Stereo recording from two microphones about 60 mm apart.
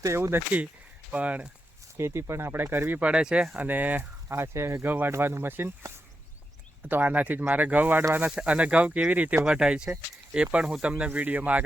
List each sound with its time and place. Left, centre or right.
0.0 s speech: right
1.1 s speech: right
2.0 s speech: right
3.0 s speech: centre
3.7 s speech: right
4.3 s speech: right
4.9 s speech: right
5.1 s speech: right
6.8 s speech: right